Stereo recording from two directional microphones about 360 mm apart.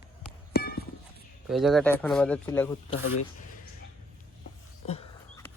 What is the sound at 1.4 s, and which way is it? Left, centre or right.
Speech, centre.